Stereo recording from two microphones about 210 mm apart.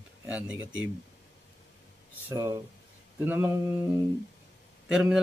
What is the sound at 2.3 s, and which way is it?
Speech, 15° right (ahead or behind).